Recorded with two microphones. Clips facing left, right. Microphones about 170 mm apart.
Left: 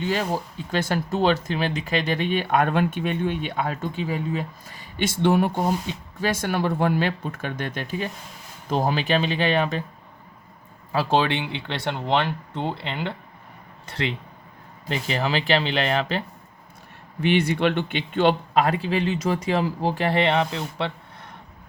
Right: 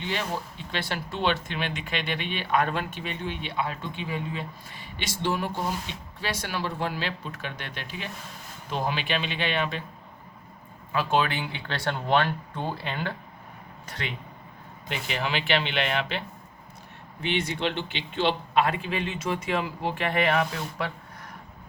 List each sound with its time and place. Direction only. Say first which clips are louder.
0.0 s speech: left 6 dB; 40° left (ahead or behind)
10.9 s speech: left 4 dB; 30° left (ahead or behind)
17.2 s speech: left 7 dB; 60° left (ahead or behind); by 20.9 s 25° left (ahead or behind)